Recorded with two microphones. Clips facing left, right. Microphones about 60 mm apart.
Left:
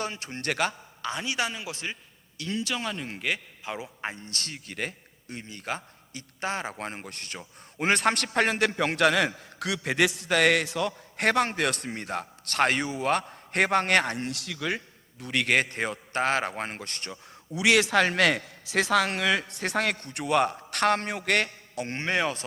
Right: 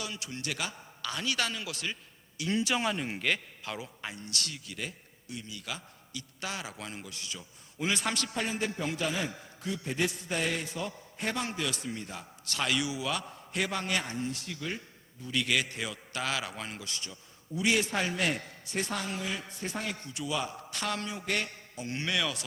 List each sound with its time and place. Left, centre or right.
0.0 s a man's voice: left
1.0 s a man's voice: left
2.6 s speech: centre
3.2 s a man's voice: centre
3.6 s a man's voice: left
4.0 s speech: left
15.2 s a man's voice: left
17.5 s a man's voice: left
21.2 s a man's voice: left
21.8 s a man's voice: left